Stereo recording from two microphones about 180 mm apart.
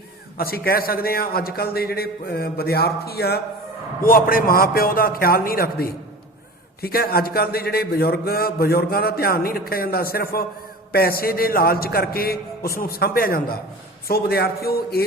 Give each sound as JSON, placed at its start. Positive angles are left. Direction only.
{"t": 0.3, "sound": "a man's voice", "side_deg": 55}